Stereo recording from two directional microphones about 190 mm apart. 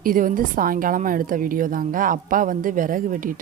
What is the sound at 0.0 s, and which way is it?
A woman's voice, 45° right (ahead or behind).